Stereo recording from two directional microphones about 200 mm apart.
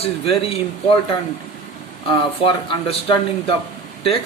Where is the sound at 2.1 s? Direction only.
25° left (ahead or behind).